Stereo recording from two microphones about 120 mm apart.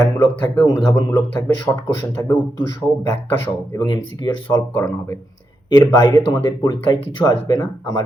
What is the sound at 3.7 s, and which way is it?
Speech, 40° left (ahead or behind).